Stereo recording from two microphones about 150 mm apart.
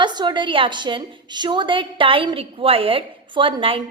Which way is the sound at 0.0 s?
30° right (ahead or behind).